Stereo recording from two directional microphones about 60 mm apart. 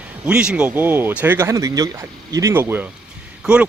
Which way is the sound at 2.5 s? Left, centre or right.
Right.